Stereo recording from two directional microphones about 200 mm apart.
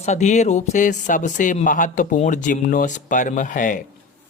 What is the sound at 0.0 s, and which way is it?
Speech, 35° left (ahead or behind).